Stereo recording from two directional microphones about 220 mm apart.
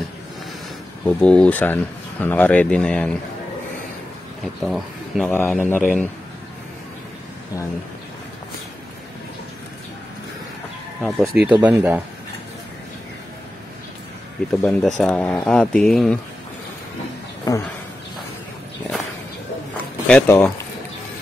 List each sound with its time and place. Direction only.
1.0 s speech: 5° left (ahead or behind)
4.4 s speech: centre (ahead or behind)
11.0 s speech: centre (ahead or behind)
14.6 s speech: centre (ahead or behind)
17.5 s speech: 15° left (ahead or behind)
20.1 s speech: 10° left (ahead or behind)